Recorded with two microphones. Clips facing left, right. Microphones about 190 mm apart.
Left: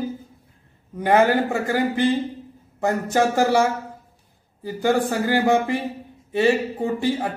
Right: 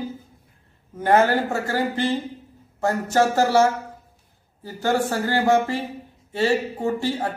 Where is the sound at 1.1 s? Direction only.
15° left (ahead or behind).